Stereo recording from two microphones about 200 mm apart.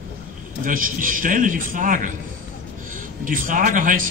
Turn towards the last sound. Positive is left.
turn(degrees=-40)  # may be behind; listen again after turning